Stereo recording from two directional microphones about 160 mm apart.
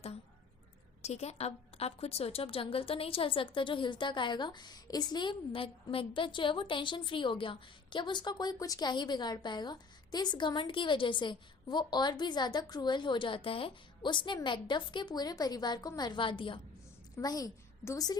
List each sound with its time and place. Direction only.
1.0 s a woman's voice: 40° left (ahead or behind); by 18.2 s 20° left (ahead or behind)